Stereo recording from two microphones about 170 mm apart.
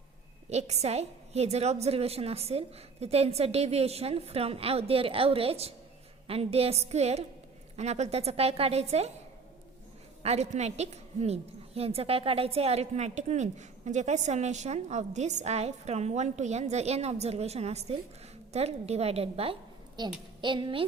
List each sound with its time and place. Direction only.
0.5 s a woman's voice: 40° right (ahead or behind)
10.2 s a woman's voice: 40° right (ahead or behind)
20.0 s speech: 25° right (ahead or behind)